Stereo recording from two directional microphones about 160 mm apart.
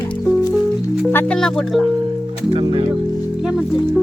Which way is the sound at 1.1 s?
5° left (ahead or behind).